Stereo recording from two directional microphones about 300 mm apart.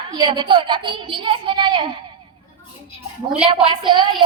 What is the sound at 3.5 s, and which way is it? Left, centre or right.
Speech, centre.